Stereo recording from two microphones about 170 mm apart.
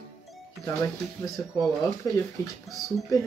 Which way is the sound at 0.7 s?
20° left (ahead or behind).